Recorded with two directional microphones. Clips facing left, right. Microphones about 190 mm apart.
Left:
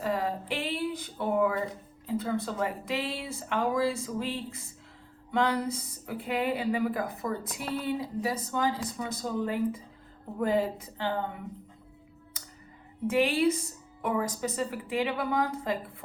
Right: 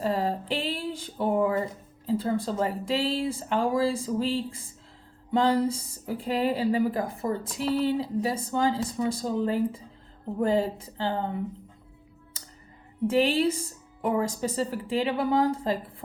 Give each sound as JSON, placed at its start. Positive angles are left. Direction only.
{"t": 0.0, "sound": "a sound", "side_deg": -30}
{"t": 2.0, "sound": "speech", "side_deg": -30}
{"t": 13.1, "sound": "speech", "side_deg": -30}